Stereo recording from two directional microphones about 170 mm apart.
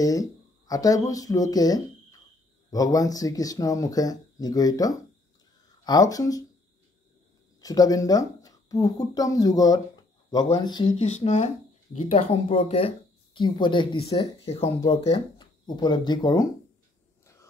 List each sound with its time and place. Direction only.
0.0 s speech: 20° left (ahead or behind)
7.6 s speech: 20° left (ahead or behind)
11.0 s speech: 40° left (ahead or behind); by 16.4 s 25° left (ahead or behind)